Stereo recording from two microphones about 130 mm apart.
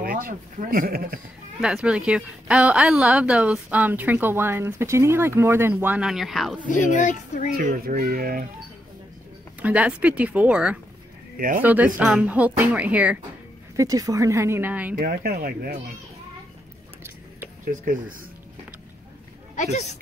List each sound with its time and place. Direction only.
0.1 s speech: 90° right
1.6 s a woman's voice: 5° right (ahead or behind)
6.0 s speech: centre (ahead or behind)
6.7 s a child's voice: 70° left (ahead or behind)
7.9 s speech: 90° right
9.6 s a woman's voice: 10° right (ahead or behind)
11.3 s speech: 90° right
11.6 s a woman's voice: 15° right (ahead or behind)
13.7 s a woman's voice: 25° right (ahead or behind)
19.5 s speech: 65° left (ahead or behind)